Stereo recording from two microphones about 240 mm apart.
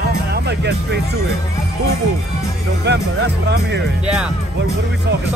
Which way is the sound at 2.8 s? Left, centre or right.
Right.